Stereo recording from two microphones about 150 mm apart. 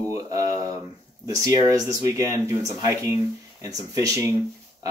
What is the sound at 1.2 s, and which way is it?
Speech, 25° right (ahead or behind).